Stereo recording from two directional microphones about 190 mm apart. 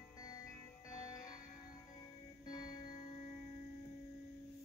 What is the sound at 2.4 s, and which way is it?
Music, 20° left (ahead or behind).